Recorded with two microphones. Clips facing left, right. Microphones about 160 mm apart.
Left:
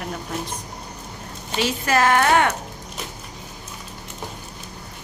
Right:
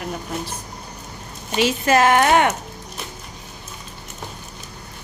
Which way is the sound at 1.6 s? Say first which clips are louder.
Right 4 dB; 20° right (ahead or behind).